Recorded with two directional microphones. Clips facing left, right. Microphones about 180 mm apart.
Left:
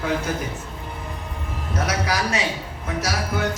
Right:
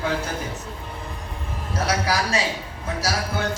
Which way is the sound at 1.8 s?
30° right (ahead or behind).